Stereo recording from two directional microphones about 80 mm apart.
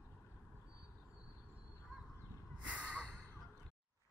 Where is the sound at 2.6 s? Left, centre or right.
Centre.